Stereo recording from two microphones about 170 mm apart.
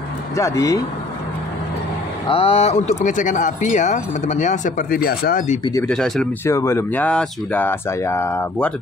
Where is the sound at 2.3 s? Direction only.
35° left (ahead or behind).